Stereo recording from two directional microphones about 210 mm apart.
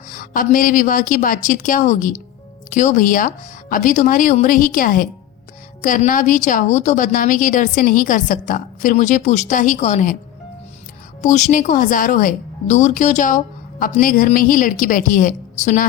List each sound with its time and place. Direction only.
0.1 s speech: 40° left (ahead or behind)
11.2 s speech: 35° left (ahead or behind)